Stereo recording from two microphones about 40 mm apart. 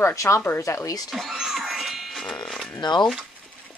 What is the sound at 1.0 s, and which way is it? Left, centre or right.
Speech, centre.